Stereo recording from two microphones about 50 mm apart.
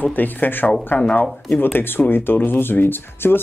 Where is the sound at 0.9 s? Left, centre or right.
Left.